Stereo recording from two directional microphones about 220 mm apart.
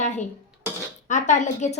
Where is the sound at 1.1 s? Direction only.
35° left (ahead or behind).